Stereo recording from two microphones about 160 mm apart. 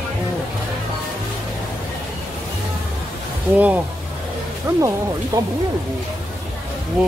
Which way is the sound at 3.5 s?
10° right (ahead or behind).